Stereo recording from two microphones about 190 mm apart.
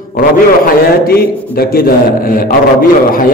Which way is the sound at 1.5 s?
50° left (ahead or behind).